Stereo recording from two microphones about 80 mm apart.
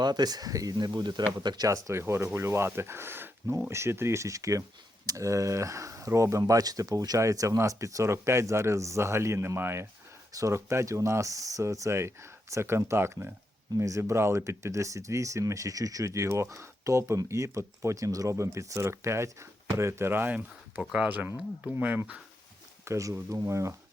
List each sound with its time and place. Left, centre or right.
0.0 s speech: right
1.7 s speech: right; by 22.2 s centre
22.9 s speech: right